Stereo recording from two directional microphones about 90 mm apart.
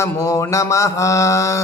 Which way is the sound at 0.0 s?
35° left (ahead or behind).